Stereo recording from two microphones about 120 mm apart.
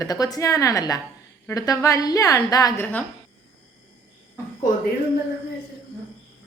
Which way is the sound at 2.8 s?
15° left (ahead or behind).